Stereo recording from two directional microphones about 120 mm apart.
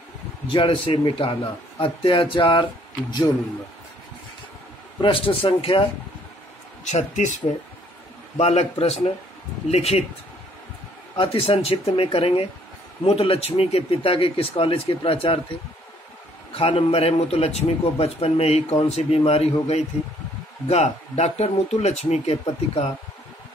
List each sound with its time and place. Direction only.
0.5 s speech: 50° left (ahead or behind)
5.0 s speech: 45° left (ahead or behind)
6.9 s speech: 75° left (ahead or behind)
8.4 s a man's voice: 65° left (ahead or behind)
11.1 s speech: 50° left (ahead or behind)
16.5 s a man's voice: 55° left (ahead or behind)